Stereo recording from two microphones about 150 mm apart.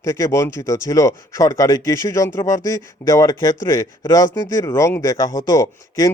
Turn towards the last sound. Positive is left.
turn(degrees=20)  # may be behind; listen again after turning